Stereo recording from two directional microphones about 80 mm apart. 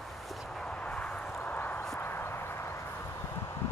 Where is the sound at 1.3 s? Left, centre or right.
Left.